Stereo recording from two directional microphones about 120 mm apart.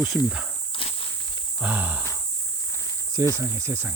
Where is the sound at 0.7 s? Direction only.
50° left (ahead or behind).